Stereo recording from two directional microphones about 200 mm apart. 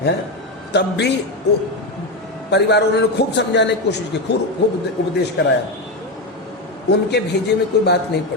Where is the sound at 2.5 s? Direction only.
55° left (ahead or behind).